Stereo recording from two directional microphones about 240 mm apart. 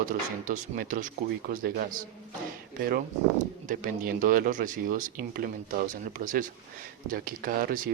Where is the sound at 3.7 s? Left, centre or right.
Right.